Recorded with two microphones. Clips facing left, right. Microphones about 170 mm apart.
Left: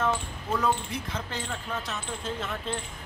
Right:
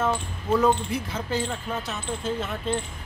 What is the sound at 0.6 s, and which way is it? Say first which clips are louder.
Speech: right 6 dB; 5° right (ahead or behind).